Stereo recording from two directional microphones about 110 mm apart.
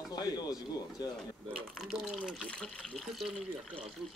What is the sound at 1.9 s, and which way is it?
Speech, 5° right (ahead or behind).